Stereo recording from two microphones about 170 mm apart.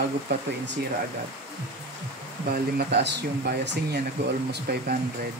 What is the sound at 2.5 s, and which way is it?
Speech, 70° right (ahead or behind).